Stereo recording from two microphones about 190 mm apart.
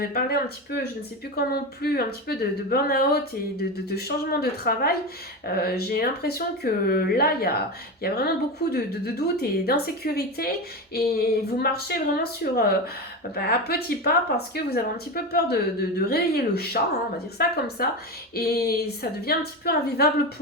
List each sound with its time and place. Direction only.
0.0 s a woman's voice: 55° left (ahead or behind)
18.3 s a woman's voice: 55° left (ahead or behind)